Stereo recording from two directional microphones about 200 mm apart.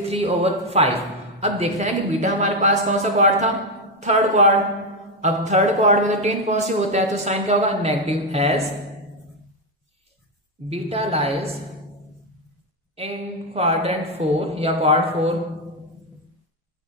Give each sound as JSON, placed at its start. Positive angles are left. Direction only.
{"t": 0.0, "sound": "speech", "side_deg": -30}
{"t": 10.7, "sound": "speech", "side_deg": -30}
{"t": 12.9, "sound": "speech", "side_deg": -30}